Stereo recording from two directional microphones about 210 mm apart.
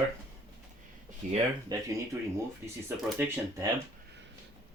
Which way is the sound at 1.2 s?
35° right (ahead or behind).